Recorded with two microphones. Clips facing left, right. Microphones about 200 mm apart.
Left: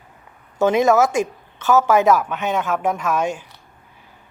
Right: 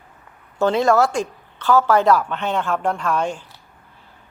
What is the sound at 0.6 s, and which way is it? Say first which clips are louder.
A woman's voice: left 1 dB; 15° left (ahead or behind).